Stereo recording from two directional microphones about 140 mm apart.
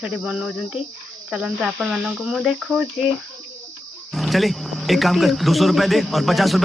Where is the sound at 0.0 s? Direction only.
5° right (ahead or behind).